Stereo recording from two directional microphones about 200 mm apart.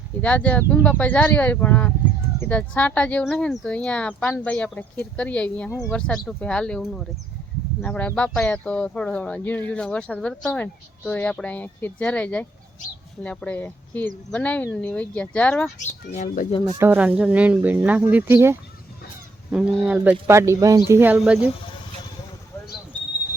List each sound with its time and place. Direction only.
0.2 s speech: 5° left (ahead or behind)
16.1 s speech: 40° left (ahead or behind)
16.7 s speech: 10° right (ahead or behind)